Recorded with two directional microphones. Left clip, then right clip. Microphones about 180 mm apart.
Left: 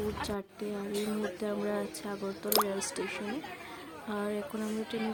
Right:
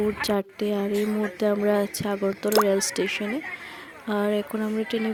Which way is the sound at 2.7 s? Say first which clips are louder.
Right 11 dB; 45° right (ahead or behind).